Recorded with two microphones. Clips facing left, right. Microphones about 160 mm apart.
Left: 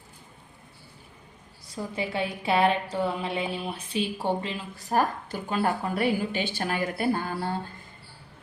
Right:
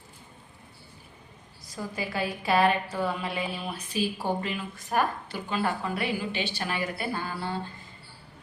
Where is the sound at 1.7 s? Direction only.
25° left (ahead or behind).